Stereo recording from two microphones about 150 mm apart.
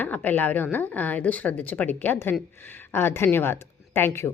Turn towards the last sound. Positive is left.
turn(degrees=15)  # may be behind; listen again after turning